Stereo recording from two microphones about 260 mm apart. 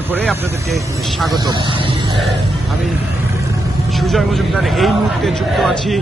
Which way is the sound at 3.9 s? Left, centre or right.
Centre.